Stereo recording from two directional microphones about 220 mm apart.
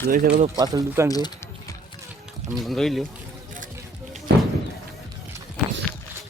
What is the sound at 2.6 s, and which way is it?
Speech, centre (ahead or behind).